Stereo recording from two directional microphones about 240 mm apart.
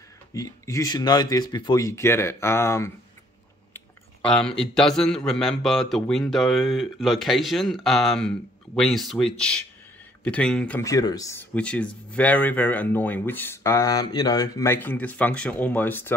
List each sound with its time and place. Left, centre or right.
0.3 s speech: centre
4.3 s a man's voice: centre